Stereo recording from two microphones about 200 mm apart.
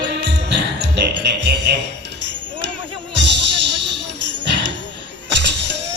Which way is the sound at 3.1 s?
60° right (ahead or behind).